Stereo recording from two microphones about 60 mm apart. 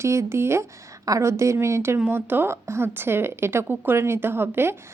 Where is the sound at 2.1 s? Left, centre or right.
Right.